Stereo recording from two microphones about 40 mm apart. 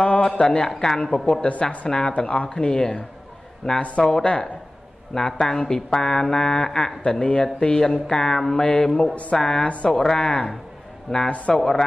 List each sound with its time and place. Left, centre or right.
0.0 s a sound: left
0.4 s speech: centre
1.6 s a woman's voice: left
1.9 s speech: centre
2.5 s speech: centre
9.1 s a woman's voice: left
9.4 s speech: centre
11.2 s a woman's voice: left
11.5 s speech: centre